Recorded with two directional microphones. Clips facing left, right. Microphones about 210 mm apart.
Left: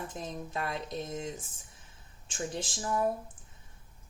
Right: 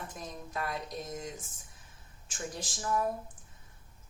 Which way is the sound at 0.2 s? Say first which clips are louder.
Left 1 dB; 25° left (ahead or behind).